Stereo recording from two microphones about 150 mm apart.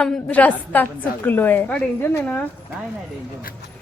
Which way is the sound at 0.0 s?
10° left (ahead or behind).